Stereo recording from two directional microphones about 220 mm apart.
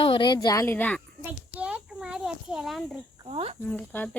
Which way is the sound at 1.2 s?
5° right (ahead or behind).